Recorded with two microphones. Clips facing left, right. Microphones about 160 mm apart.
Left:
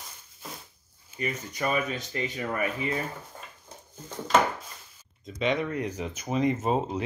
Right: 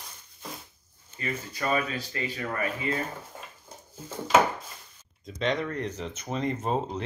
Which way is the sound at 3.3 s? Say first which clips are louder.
Right 1 dB; 10° right (ahead or behind).